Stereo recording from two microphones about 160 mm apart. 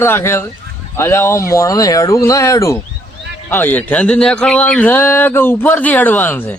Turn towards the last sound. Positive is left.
turn(degrees=10)  # may be behind; listen again after turning